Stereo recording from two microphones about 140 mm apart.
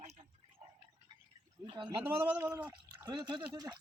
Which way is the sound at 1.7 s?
35° right (ahead or behind).